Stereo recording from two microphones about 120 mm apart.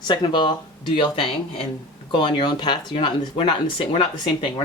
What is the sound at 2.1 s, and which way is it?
Speech, 40° left (ahead or behind).